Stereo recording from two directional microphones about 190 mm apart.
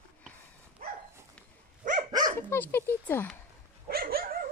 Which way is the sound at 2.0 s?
20° right (ahead or behind).